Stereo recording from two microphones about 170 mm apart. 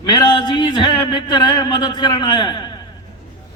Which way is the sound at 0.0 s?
25° left (ahead or behind).